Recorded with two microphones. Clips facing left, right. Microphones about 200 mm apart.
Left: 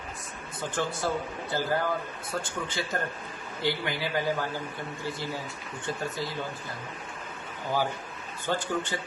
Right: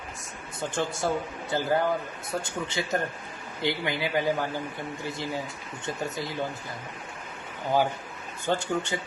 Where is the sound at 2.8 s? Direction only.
20° right (ahead or behind).